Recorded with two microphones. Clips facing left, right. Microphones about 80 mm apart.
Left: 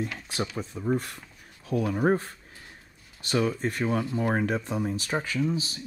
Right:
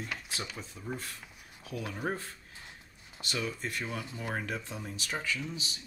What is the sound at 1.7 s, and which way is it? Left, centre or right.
Speech, left.